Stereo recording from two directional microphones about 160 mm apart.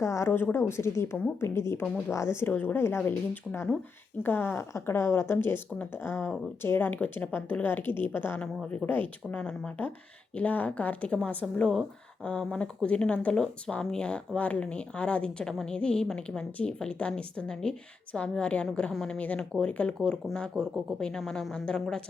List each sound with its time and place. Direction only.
0.0 s a woman's voice: 20° left (ahead or behind)